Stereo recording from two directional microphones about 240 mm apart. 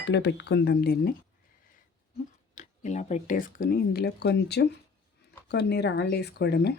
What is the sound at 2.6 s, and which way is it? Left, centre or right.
Speech, left.